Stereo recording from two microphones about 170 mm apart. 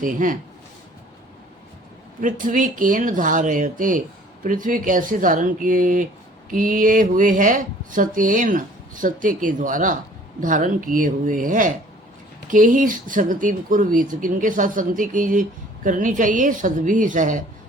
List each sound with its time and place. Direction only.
0.0 s speech: 50° right (ahead or behind)
2.2 s speech: 50° right (ahead or behind)